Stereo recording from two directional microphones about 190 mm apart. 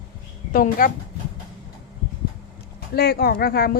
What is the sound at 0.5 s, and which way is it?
Speech, 45° left (ahead or behind).